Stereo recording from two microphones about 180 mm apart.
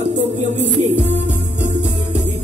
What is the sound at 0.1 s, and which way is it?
Music, 40° right (ahead or behind).